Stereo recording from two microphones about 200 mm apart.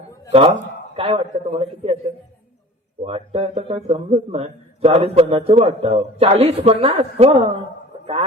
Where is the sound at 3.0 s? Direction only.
30° right (ahead or behind).